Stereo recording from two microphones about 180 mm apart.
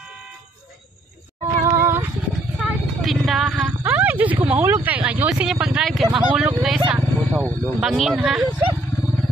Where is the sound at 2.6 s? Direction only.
Centre (ahead or behind).